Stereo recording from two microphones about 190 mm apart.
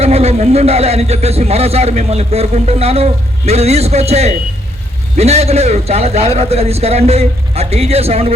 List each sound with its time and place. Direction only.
0.0 s a man's voice: 35° right (ahead or behind)